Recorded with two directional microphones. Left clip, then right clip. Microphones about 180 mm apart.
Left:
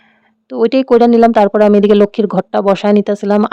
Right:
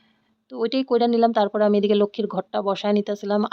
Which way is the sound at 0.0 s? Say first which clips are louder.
Left 13 dB; 40° left (ahead or behind).